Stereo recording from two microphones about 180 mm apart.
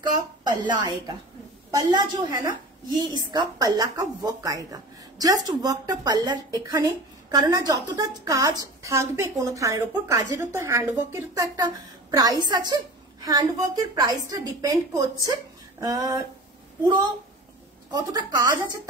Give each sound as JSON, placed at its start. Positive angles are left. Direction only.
{"t": 0.0, "sound": "a woman's voice", "side_deg": -25}
{"t": 17.9, "sound": "a woman's voice", "side_deg": -20}